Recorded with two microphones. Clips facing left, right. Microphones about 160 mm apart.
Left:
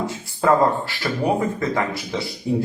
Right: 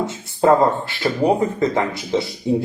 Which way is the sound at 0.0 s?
20° right (ahead or behind).